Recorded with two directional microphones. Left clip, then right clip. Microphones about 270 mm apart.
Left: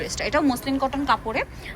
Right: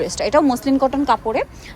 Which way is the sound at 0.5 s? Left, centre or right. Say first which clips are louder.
Right 7 dB; right.